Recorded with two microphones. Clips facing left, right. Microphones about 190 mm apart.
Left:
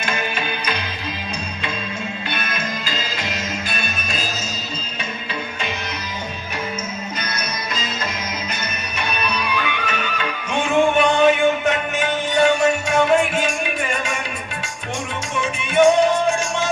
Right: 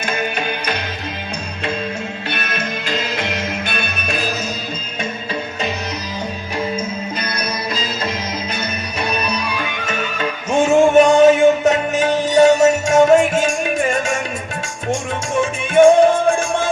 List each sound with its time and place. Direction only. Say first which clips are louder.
0.0 s music: right 3 dB; 45° right (ahead or behind)
2.3 s music: right 4 dB; 65° right (ahead or behind)
9.0 s music: right 2 dB; 40° right (ahead or behind)
15.4 s music: right 5 dB; 50° right (ahead or behind)